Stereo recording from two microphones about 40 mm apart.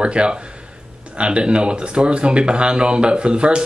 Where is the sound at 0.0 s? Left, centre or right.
Right.